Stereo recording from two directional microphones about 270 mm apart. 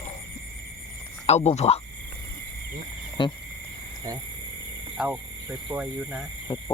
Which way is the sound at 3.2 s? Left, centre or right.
Centre.